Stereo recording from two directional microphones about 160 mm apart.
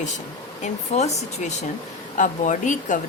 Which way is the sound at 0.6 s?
45° left (ahead or behind).